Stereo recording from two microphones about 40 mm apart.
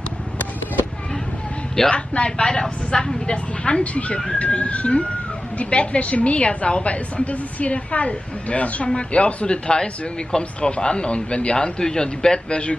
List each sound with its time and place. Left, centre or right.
1.9 s speech: left
3.8 s a woman's voice: left